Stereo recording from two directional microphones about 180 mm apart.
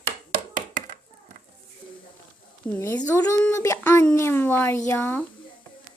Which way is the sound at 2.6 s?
10° left (ahead or behind).